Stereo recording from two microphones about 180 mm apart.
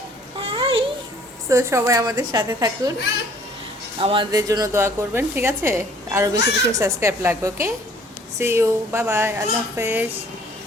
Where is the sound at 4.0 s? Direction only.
30° right (ahead or behind); by 10.1 s 10° right (ahead or behind).